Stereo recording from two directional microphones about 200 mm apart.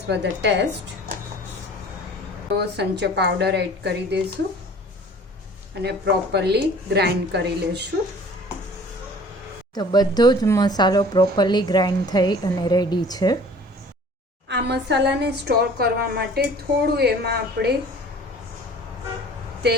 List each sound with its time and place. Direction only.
0.1 s a woman's voice: 60° right (ahead or behind)
2.6 s a woman's voice: 55° right (ahead or behind)
5.8 s a woman's voice: 55° right (ahead or behind)
9.7 s speech: 20° left (ahead or behind)
14.4 s a woman's voice: 60° right (ahead or behind)